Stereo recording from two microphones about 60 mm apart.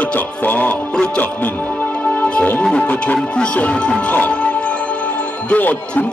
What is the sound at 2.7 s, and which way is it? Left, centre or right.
Speech, centre.